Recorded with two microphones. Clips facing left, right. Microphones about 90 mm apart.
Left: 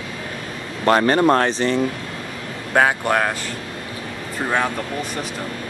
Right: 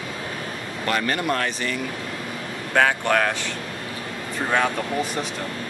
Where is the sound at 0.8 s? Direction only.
40° left (ahead or behind).